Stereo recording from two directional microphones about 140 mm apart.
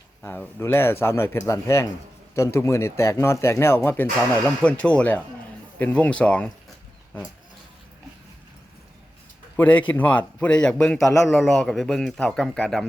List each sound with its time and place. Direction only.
0.2 s a man's voice: 15° left (ahead or behind)
9.6 s a man's voice: 10° left (ahead or behind)